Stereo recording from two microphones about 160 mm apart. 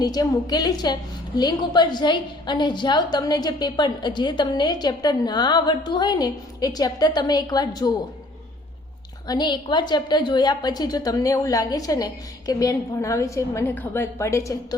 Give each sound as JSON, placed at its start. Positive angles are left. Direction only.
{"t": 0.0, "sound": "a woman's voice", "side_deg": 25}
{"t": 9.2, "sound": "a woman's voice", "side_deg": 25}